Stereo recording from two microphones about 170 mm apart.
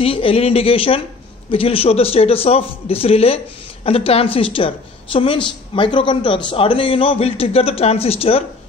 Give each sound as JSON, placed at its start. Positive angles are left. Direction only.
{"t": 0.0, "sound": "a woman's voice", "side_deg": 35}